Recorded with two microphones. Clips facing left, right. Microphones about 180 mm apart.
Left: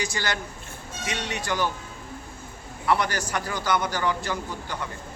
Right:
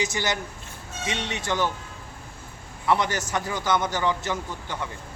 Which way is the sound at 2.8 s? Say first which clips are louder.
Right 1 dB; 20° right (ahead or behind).